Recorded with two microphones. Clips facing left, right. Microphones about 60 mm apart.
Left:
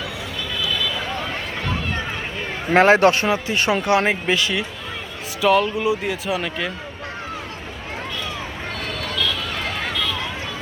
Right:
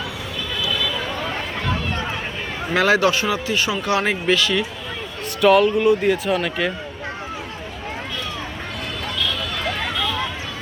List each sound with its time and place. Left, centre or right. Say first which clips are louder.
1.6 s a sound: right 1 dB; centre
2.7 s speech: left 4 dB; left; by 4.6 s centre
5.4 s speech: right 3 dB; centre